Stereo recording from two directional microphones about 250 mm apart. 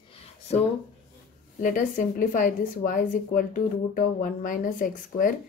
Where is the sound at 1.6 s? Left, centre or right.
Left.